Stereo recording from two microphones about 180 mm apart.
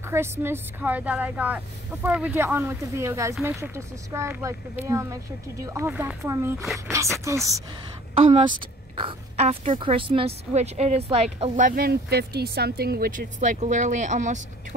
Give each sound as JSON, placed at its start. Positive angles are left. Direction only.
{"t": 0.1, "sound": "speech", "side_deg": -15}
{"t": 8.1, "sound": "a woman's voice", "side_deg": -30}
{"t": 11.5, "sound": "speech", "side_deg": -50}